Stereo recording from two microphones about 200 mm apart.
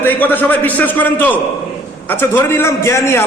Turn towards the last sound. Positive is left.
turn(degrees=15)  # may be behind; listen again after turning